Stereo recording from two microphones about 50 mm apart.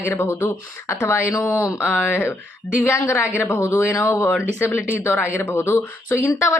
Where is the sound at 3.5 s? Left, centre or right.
Left.